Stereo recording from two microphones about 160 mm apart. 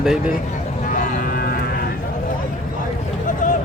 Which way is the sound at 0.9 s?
65° left (ahead or behind).